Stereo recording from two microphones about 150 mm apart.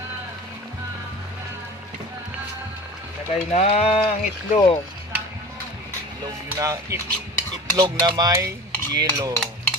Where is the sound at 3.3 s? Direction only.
45° left (ahead or behind).